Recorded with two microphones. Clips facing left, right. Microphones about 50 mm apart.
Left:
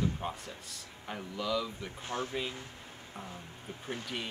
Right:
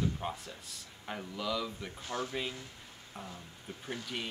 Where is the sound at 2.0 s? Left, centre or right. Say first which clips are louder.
Left 1 dB; left.